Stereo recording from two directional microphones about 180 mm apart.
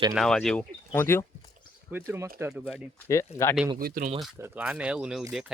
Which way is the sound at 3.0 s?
15° left (ahead or behind).